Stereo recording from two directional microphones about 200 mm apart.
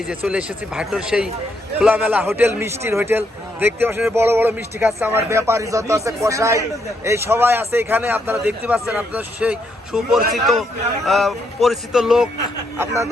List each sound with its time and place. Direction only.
0.1 s a man's voice: 5° right (ahead or behind)
12.7 s a man's voice: 15° right (ahead or behind)